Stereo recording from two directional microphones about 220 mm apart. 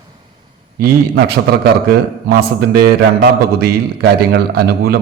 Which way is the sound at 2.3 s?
45° right (ahead or behind).